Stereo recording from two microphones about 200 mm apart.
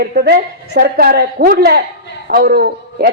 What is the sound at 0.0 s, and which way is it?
A man's voice, 50° right (ahead or behind).